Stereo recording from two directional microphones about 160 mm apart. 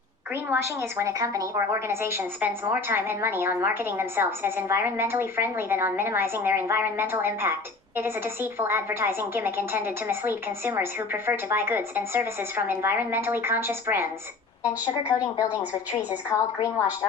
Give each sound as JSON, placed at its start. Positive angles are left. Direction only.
{"t": 0.5, "sound": "a woman's voice", "side_deg": -15}
{"t": 15.0, "sound": "a woman's voice", "side_deg": 20}